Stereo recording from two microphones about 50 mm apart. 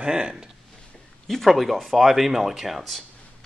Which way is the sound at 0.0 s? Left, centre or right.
Centre.